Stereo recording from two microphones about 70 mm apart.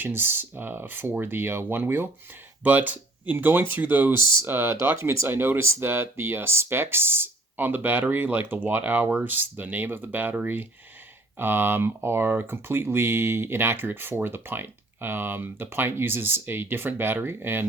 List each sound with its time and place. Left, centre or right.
0.0 s speech: right